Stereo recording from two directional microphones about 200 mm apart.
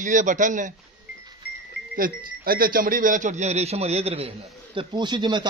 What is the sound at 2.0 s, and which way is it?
Speech, 45° right (ahead or behind).